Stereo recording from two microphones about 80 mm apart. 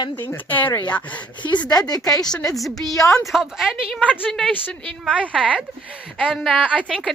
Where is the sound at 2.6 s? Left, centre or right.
Centre.